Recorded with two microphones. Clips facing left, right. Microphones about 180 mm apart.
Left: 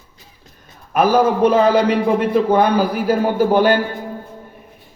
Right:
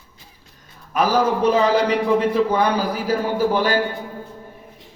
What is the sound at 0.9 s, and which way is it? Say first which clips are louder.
A man's voice: left 4 dB; 55° left (ahead or behind).